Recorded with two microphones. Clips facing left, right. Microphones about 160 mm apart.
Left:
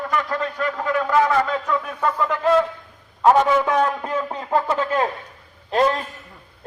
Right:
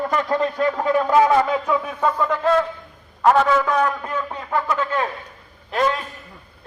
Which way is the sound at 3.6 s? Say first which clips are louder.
Left 1 dB; 25° left (ahead or behind).